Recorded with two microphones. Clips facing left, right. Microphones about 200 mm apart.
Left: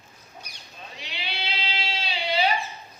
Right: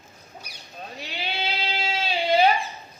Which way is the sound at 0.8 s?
45° right (ahead or behind).